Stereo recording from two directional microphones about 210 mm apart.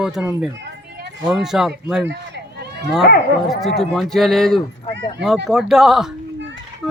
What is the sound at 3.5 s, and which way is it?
Speech, centre (ahead or behind).